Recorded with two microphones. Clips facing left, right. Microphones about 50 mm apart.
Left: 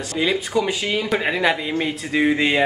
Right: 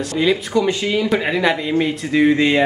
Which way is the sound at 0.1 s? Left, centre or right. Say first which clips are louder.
Right 3 dB; centre.